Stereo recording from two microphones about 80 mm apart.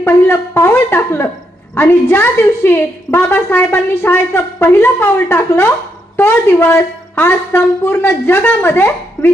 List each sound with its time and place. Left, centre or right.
0.0 s a woman's voice: left